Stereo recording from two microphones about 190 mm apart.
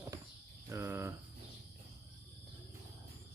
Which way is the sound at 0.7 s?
15° right (ahead or behind).